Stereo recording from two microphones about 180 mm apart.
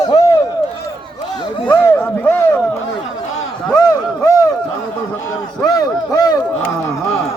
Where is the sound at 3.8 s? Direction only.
20° left (ahead or behind).